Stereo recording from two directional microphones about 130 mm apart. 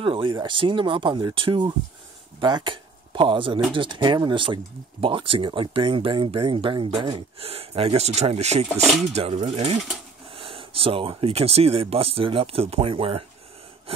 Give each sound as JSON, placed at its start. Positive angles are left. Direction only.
{"t": 0.0, "sound": "speech", "side_deg": -45}